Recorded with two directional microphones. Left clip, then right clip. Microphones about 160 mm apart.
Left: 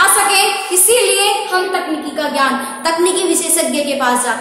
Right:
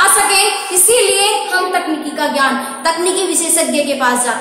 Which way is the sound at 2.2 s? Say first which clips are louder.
Right 1 dB; 15° left (ahead or behind).